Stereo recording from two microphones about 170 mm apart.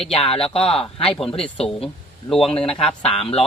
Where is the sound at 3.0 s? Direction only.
35° left (ahead or behind).